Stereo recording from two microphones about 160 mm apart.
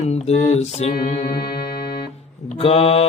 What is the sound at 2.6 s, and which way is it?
Mantra, 40° left (ahead or behind).